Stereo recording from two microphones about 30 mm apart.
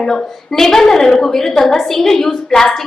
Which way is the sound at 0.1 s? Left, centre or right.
Centre.